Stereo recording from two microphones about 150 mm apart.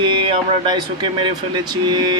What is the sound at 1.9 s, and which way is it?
Vehicle, 30° right (ahead or behind).